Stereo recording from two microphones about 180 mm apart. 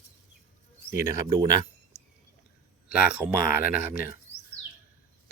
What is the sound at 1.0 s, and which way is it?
Speech, 15° right (ahead or behind).